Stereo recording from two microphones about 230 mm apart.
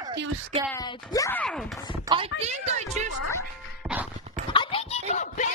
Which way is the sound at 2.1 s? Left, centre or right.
Right.